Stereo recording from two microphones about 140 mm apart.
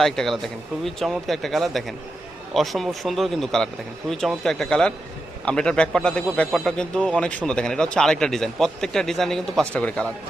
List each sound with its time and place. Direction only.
0.0 s a man's voice: 5° left (ahead or behind)